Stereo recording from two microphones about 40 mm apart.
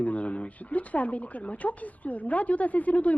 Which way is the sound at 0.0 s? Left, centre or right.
Left.